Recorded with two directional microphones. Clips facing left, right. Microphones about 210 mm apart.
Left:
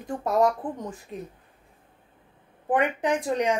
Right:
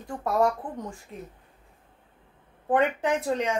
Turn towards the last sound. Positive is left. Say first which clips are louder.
# left 1 dB
turn(degrees=15)  # may be behind; listen again after turning